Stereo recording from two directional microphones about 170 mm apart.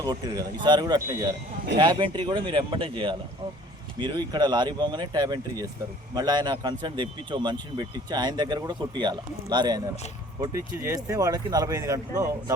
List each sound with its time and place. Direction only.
0.0 s speech: 20° right (ahead or behind)